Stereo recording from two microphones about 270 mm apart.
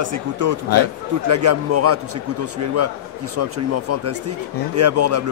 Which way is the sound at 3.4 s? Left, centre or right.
Right.